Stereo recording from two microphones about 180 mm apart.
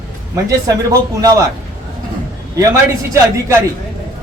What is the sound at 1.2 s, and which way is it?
Speech, 20° right (ahead or behind).